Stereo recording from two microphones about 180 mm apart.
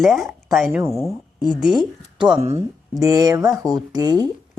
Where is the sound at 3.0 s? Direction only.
20° right (ahead or behind).